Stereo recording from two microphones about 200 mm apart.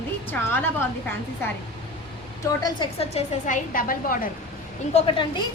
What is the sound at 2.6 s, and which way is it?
A woman's voice, 25° left (ahead or behind).